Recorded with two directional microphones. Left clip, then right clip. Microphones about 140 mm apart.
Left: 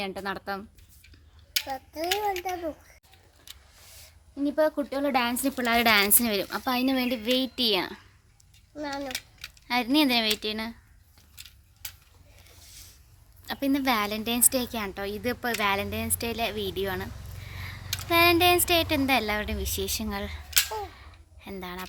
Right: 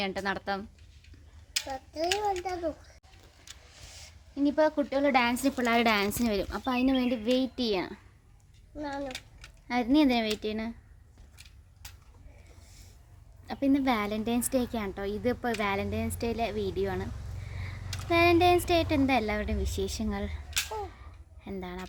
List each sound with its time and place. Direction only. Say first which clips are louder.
0.0 s a woman's voice: right 1 dB; 20° right (ahead or behind)
1.5 s a child's voice: left 2 dB; 20° left (ahead or behind)
4.0 s a woman's voice: right 1 dB; 15° right (ahead or behind)
8.7 s a child's voice: left 3 dB; 30° left (ahead or behind)
9.6 s a woman's voice: left 2 dB; 30° right (ahead or behind)
11.3 s a sound: left 7 dB; 35° left (ahead or behind)
13.5 s a woman's voice: left 1 dB; 10° right (ahead or behind)
17.5 s a sound: left 5 dB; 10° right (ahead or behind)
18.1 s a woman's voice: left 2 dB; 10° right (ahead or behind)
20.5 s a sound: left 6 dB; 45° left (ahead or behind)
21.4 s speech: left 2 dB; 20° right (ahead or behind)